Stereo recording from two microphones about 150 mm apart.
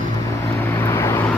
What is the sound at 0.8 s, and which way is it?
Vehicle, 20° left (ahead or behind).